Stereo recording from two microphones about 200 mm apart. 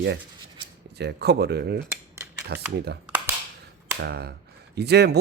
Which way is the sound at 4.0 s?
55° right (ahead or behind).